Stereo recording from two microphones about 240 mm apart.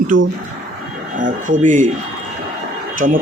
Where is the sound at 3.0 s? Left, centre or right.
Right.